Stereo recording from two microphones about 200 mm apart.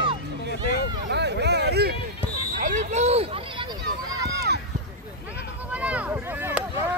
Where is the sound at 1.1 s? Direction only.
60° right (ahead or behind).